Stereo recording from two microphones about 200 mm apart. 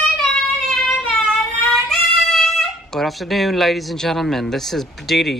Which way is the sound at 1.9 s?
Centre (ahead or behind).